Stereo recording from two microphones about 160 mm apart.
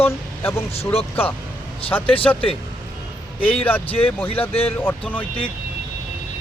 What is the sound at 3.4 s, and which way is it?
Speech, 10° left (ahead or behind).